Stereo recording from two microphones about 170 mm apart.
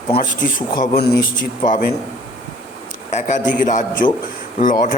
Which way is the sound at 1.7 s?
55° left (ahead or behind).